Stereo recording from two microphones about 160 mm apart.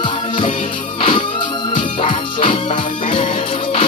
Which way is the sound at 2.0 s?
35° left (ahead or behind).